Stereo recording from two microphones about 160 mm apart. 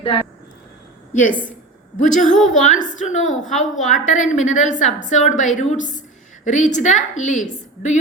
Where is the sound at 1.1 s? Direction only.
55° left (ahead or behind).